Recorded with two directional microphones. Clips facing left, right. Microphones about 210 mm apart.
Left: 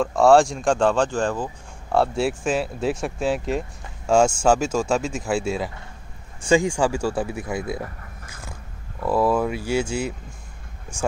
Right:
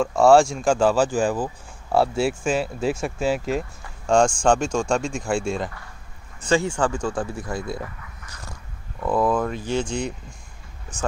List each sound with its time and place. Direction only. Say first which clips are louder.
0.0 s speech: even; centre (ahead or behind)
8.0 s a sound: left 1 dB; 50° left (ahead or behind)
9.0 s speech: left 1 dB; 5° left (ahead or behind)